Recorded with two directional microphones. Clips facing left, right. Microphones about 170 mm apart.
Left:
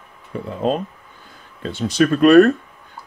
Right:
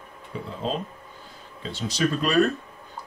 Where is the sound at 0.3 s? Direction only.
55° left (ahead or behind).